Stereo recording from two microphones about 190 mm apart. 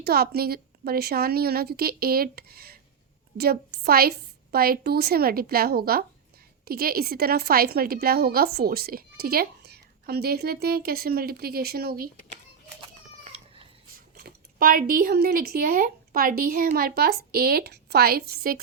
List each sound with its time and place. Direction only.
0.0 s a woman's voice: 55° right (ahead or behind)
13.2 s cat: 30° right (ahead or behind)
14.2 s a woman's voice: 50° right (ahead or behind)